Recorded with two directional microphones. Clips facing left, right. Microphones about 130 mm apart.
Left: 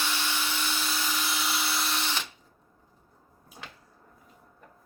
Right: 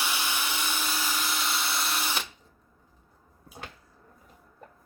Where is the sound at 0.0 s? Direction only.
15° right (ahead or behind).